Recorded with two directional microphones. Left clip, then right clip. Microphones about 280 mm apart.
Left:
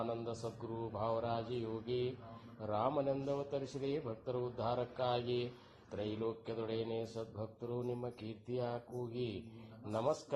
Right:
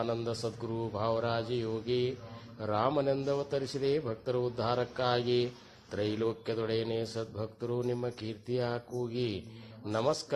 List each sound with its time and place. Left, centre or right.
0.0 s a man's voice: right